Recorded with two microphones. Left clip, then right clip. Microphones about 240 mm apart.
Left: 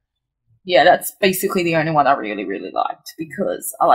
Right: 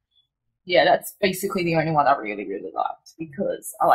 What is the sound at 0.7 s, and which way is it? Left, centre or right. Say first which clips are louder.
A woman's voice: left 5 dB; left.